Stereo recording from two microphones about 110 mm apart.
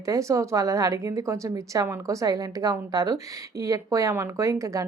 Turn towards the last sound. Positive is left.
turn(degrees=-30)  # may be behind; listen again after turning